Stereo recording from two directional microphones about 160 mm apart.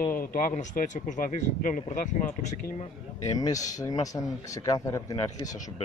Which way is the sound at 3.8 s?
20° left (ahead or behind).